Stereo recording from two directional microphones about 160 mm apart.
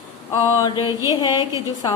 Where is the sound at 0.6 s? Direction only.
30° left (ahead or behind).